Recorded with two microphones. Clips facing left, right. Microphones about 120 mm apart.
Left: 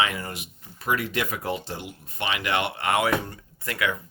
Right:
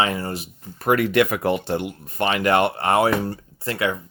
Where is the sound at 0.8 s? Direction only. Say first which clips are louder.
Right 9 dB; 60° right (ahead or behind); by 4.0 s 30° right (ahead or behind).